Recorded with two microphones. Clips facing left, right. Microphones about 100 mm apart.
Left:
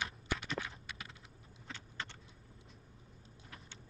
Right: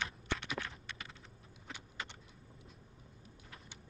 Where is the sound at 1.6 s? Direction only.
10° right (ahead or behind).